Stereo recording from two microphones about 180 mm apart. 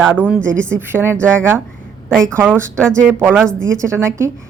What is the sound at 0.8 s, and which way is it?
Speech, 15° right (ahead or behind).